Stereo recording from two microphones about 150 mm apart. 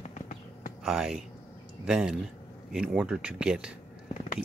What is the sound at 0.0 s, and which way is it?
Clip-clop, 55° left (ahead or behind).